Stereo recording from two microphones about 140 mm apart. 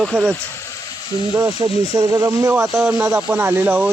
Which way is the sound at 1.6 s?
30° right (ahead or behind).